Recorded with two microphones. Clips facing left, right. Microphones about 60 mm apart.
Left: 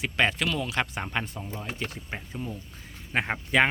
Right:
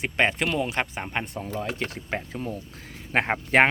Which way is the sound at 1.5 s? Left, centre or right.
Right.